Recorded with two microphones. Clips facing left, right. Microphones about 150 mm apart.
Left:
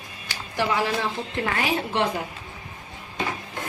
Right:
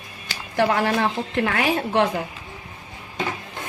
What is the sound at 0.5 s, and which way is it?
Speech, 55° right (ahead or behind).